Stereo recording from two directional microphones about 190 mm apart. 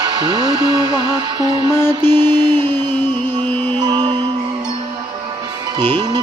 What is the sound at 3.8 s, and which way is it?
Music, 25° right (ahead or behind).